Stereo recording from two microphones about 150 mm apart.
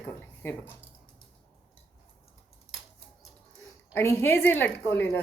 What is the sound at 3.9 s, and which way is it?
Speech, 15° left (ahead or behind).